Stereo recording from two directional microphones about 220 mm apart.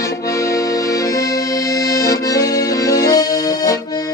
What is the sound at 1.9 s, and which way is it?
Accordion, 15° left (ahead or behind).